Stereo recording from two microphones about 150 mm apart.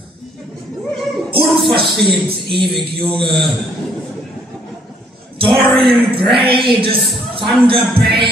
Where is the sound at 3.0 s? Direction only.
35° right (ahead or behind).